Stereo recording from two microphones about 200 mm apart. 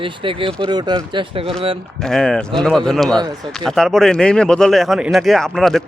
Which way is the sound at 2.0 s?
Centre (ahead or behind).